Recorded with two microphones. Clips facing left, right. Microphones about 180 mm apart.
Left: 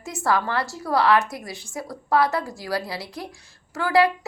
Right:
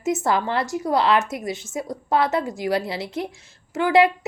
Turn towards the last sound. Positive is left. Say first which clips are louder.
# right 2 dB
turn(degrees=-20)  # may be behind; listen again after turning